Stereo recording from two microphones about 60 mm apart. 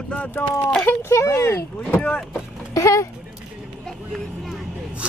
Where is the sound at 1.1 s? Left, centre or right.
Left.